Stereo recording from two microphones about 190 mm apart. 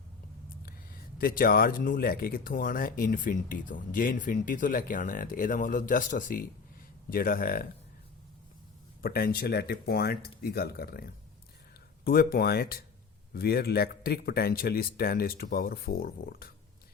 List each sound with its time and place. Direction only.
1.2 s speech: 50° left (ahead or behind)
9.0 s speech: 50° left (ahead or behind)